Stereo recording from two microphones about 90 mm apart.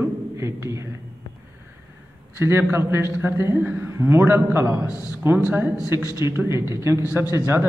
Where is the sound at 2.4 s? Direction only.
25° right (ahead or behind).